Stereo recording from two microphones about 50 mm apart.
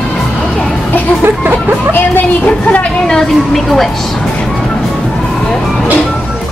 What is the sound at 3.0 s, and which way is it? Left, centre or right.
Speech, centre.